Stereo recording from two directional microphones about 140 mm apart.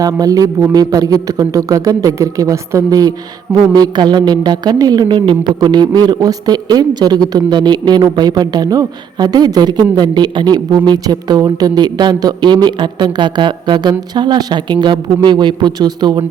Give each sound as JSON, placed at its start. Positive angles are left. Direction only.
{"t": 0.0, "sound": "a woman's voice", "side_deg": -25}